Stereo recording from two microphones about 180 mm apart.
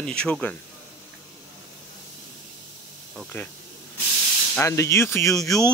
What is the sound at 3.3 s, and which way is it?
Speech, 10° left (ahead or behind).